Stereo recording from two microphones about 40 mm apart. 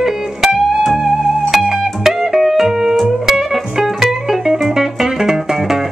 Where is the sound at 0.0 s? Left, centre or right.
Centre.